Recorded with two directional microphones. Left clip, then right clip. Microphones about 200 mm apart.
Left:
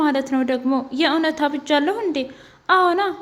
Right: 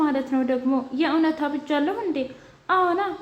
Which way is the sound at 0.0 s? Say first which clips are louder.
Left 3 dB; 40° left (ahead or behind).